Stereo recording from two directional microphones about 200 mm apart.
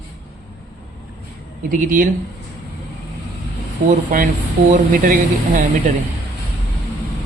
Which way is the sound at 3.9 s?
40° right (ahead or behind).